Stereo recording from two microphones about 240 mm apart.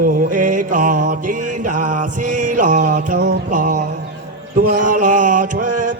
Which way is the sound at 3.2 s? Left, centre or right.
Right.